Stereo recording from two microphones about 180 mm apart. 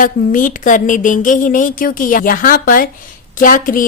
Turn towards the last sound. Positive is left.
turn(degrees=50)  # may be behind; listen again after turning